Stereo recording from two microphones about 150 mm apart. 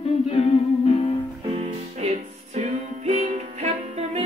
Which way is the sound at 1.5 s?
45° right (ahead or behind).